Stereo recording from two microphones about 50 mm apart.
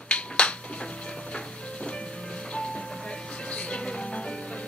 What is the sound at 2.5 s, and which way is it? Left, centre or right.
Music, left.